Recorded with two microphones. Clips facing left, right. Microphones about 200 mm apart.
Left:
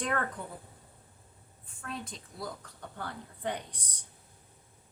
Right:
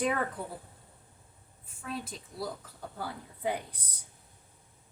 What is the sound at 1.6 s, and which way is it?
A woman's voice, 5° right (ahead or behind).